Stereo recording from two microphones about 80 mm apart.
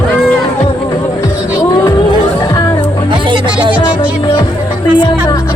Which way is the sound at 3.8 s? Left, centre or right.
Left.